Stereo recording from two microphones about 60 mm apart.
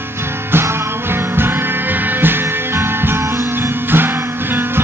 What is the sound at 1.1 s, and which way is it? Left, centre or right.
Music, right.